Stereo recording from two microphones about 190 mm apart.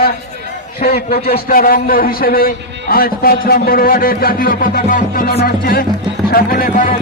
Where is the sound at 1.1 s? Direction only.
50° left (ahead or behind).